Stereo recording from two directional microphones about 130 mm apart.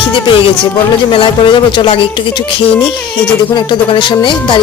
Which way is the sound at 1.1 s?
40° left (ahead or behind).